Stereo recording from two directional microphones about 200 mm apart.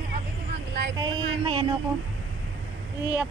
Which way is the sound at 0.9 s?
20° right (ahead or behind).